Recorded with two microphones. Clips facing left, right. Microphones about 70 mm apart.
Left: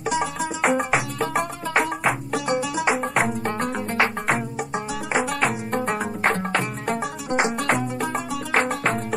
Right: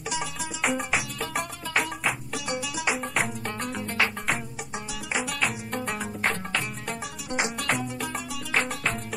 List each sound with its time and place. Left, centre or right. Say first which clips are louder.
0.0 s music: left 8 dB; left